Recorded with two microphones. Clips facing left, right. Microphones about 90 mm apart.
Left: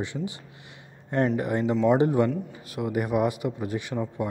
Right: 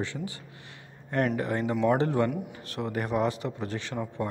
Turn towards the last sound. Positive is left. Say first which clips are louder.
# left 4 dB
turn(degrees=15)  # may be behind; listen again after turning